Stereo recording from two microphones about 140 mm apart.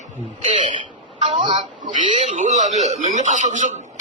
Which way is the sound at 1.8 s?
65° right (ahead or behind).